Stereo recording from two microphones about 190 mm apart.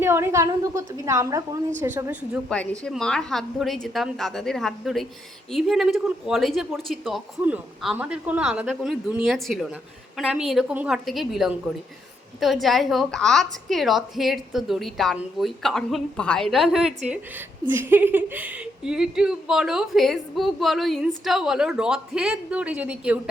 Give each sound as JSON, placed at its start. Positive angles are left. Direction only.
{"t": 0.0, "sound": "a woman's voice", "side_deg": -10}
{"t": 2.5, "sound": "a woman's voice", "side_deg": 5}